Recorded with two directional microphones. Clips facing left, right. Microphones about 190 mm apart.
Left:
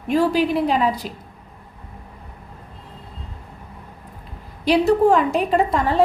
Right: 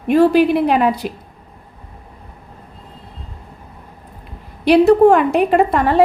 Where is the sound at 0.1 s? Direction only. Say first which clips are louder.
Right 6 dB; 65° right (ahead or behind).